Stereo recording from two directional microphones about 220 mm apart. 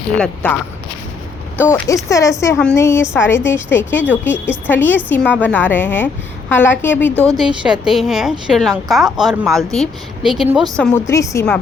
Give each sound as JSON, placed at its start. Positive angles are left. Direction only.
{"t": 1.6, "sound": "a woman's voice", "side_deg": 10}
{"t": 7.3, "sound": "a woman's voice", "side_deg": 0}
{"t": 10.9, "sound": "a woman's voice", "side_deg": 15}